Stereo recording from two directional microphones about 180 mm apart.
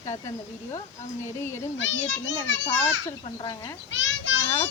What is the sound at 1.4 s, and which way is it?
Speech, 15° left (ahead or behind).